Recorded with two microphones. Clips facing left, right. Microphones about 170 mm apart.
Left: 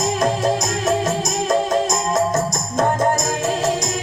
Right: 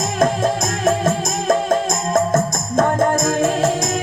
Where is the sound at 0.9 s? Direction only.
50° right (ahead or behind).